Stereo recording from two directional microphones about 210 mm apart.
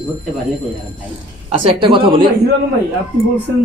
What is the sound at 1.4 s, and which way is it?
Speech, 25° right (ahead or behind).